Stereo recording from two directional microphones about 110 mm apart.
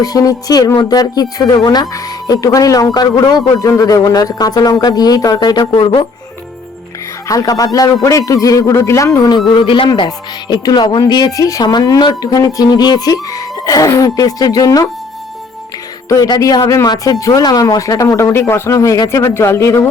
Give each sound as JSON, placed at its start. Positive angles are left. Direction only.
{"t": 0.0, "sound": "speech", "side_deg": 35}
{"t": 7.3, "sound": "speech", "side_deg": 30}
{"t": 9.6, "sound": "speech", "side_deg": 50}
{"t": 10.5, "sound": "speech", "side_deg": 40}
{"t": 16.0, "sound": "speech", "side_deg": 30}